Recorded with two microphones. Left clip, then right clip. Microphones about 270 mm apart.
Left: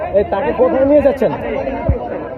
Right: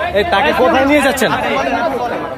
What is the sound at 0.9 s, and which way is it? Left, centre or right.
Speech, centre.